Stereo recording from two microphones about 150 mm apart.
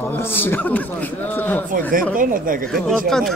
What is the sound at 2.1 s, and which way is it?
Speech, 65° right (ahead or behind).